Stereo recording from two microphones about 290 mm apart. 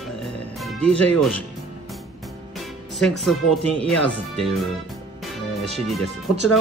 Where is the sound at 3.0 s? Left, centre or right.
Centre.